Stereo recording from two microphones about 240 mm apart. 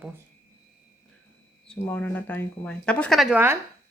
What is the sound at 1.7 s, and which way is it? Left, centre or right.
Speech, centre.